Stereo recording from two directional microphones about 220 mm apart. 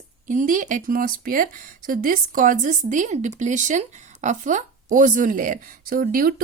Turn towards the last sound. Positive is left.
turn(degrees=-40)  # may be behind; listen again after turning